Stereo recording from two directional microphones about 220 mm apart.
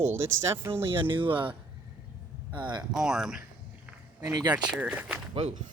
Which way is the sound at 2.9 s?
Centre (ahead or behind).